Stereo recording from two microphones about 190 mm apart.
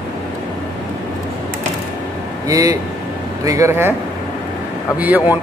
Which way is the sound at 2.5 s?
20° right (ahead or behind).